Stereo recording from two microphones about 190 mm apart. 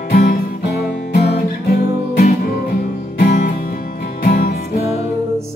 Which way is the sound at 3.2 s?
45° left (ahead or behind).